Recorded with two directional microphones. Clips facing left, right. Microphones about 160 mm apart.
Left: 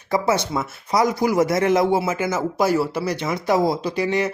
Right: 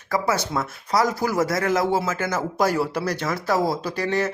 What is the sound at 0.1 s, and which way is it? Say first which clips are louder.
Speech: left 3 dB; 20° left (ahead or behind).